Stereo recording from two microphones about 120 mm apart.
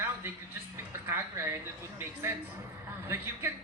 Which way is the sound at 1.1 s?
20° right (ahead or behind).